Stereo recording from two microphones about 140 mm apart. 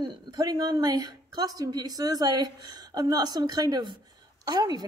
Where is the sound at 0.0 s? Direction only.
25° right (ahead or behind).